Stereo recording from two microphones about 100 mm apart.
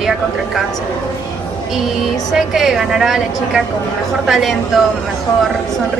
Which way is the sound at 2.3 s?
5° right (ahead or behind).